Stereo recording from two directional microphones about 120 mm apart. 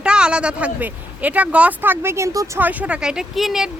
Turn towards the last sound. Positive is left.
turn(degrees=0)  # may be behind; listen again after turning